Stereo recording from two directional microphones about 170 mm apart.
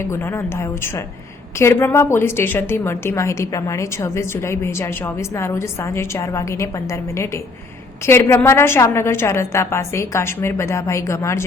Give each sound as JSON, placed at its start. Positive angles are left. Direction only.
{"t": 0.0, "sound": "a woman's voice", "side_deg": 15}